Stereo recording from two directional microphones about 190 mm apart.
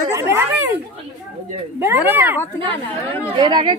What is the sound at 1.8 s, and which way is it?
Speech, 10° right (ahead or behind).